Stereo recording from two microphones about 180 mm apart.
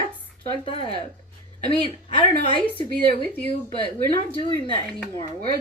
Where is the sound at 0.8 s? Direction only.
25° right (ahead or behind).